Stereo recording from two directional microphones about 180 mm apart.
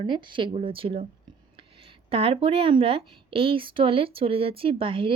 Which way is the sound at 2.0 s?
35° right (ahead or behind).